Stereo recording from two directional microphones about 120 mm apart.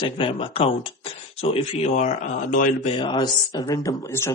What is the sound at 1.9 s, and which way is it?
Speech, 90° left.